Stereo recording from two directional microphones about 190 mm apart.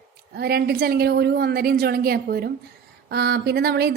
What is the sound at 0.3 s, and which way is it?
Speech, 55° right (ahead or behind).